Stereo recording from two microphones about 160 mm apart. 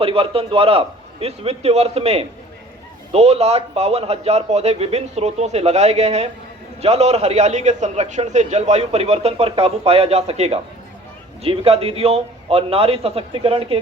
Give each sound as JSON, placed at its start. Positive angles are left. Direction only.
{"t": 0.0, "sound": "a man's voice", "side_deg": -35}